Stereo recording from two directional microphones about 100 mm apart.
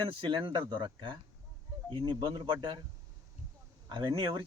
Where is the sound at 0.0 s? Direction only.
55° right (ahead or behind).